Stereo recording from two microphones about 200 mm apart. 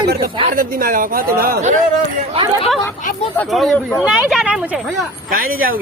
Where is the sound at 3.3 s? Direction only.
Centre (ahead or behind).